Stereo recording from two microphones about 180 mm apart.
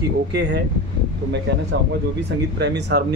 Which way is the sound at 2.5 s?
65° right (ahead or behind).